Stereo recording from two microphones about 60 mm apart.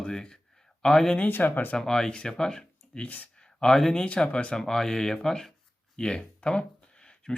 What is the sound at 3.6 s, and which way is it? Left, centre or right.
Speech, centre.